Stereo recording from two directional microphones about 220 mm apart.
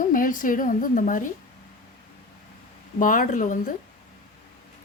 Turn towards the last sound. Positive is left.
turn(degrees=35)  # may be behind; listen again after turning